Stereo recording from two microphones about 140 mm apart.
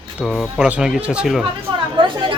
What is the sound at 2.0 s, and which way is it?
Speech, 35° right (ahead or behind).